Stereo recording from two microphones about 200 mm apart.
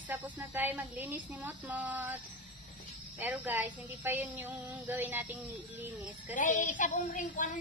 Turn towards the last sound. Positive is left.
turn(degrees=40)  # may be behind; listen again after turning